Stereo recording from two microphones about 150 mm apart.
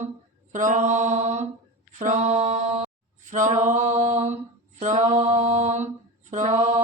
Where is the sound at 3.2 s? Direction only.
55° right (ahead or behind).